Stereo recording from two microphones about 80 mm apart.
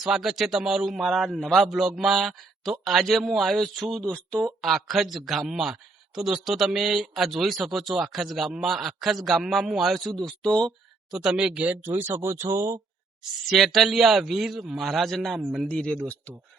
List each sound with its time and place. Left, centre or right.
0.0 s a man's voice: centre
11.1 s speech: centre; by 12.8 s right
13.5 s a man's voice: centre
15.6 s speech: centre